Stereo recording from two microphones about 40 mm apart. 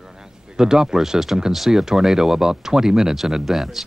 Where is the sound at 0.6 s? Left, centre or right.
Centre.